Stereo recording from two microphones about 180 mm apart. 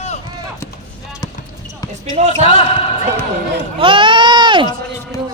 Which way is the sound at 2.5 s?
30° left (ahead or behind).